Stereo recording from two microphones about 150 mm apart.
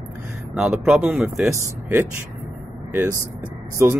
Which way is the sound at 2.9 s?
15° right (ahead or behind).